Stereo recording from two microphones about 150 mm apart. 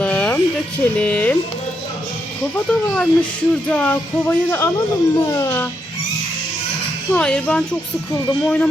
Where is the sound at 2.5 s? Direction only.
10° left (ahead or behind).